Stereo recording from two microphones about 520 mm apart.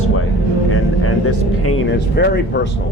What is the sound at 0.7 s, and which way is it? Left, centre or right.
Vehicle, left.